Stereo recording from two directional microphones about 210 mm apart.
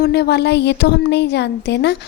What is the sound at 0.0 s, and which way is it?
A woman's voice, 50° left (ahead or behind).